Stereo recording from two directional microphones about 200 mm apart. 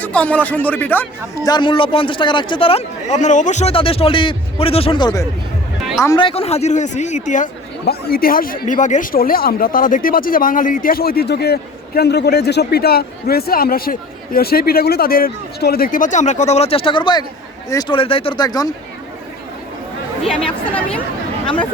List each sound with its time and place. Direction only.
0.0 s speech: 5° left (ahead or behind)
1.5 s a man's voice: 25° left (ahead or behind)
20.2 s speech: 5° left (ahead or behind)
21.4 s speech: 25° left (ahead or behind)